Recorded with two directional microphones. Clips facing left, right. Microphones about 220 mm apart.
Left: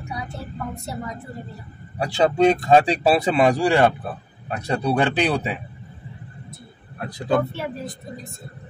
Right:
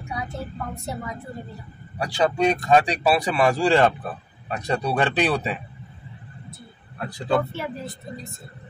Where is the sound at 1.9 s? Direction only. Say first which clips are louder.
Left 3 dB; 25° left (ahead or behind).